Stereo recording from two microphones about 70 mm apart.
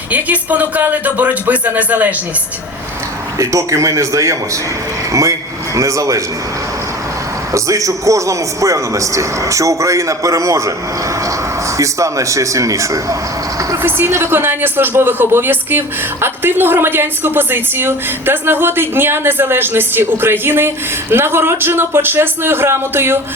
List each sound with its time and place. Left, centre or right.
0.1 s speech: right
3.3 s a man's voice: right
5.7 s a man's voice: right
7.5 s a man's voice: right
11.8 s a man's voice: right
13.8 s a woman's voice: right